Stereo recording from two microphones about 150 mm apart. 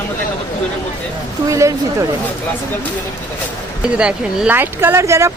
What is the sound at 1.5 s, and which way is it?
Speech, 20° right (ahead or behind).